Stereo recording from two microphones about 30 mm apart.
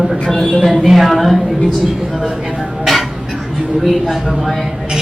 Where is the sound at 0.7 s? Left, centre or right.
Centre.